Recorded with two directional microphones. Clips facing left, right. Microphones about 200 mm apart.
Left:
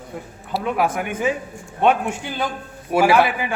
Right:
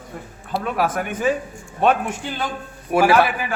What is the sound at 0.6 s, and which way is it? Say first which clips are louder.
Speech: left 1 dB; 15° left (ahead or behind).